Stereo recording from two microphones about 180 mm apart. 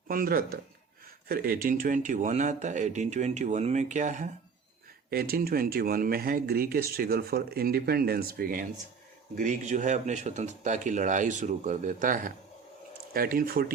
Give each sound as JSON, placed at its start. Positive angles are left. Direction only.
{"t": 0.1, "sound": "speech", "side_deg": -55}
{"t": 5.1, "sound": "speech", "side_deg": -55}